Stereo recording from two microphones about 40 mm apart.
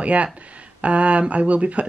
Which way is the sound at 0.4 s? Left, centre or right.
Right.